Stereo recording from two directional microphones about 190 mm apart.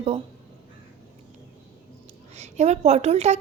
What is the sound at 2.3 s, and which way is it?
A woman's voice, 35° right (ahead or behind).